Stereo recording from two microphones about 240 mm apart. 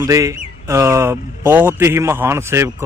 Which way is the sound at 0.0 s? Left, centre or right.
Centre.